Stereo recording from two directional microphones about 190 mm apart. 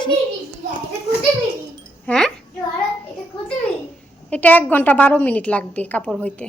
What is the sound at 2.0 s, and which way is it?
Wind chime, 5° left (ahead or behind).